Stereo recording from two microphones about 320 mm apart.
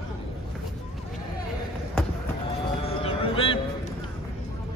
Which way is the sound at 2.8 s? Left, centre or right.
Centre.